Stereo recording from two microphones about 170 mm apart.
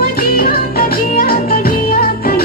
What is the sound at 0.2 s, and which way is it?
Music, 60° left (ahead or behind).